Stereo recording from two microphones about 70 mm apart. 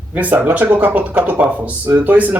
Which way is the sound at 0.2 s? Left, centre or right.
Right.